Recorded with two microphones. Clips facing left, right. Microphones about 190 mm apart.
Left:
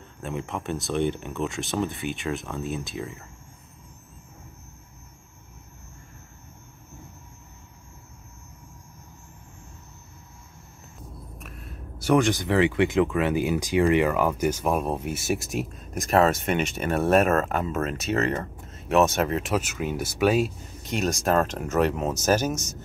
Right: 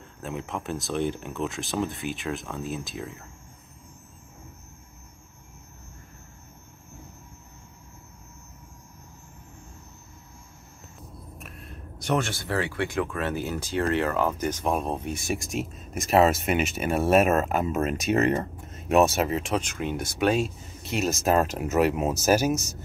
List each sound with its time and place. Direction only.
0.2 s speech: centre (ahead or behind)
11.3 s speech: centre (ahead or behind)